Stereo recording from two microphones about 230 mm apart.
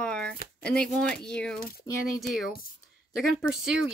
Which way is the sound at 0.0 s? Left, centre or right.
Centre.